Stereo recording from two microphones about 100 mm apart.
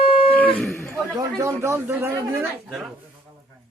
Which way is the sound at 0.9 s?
30° right (ahead or behind).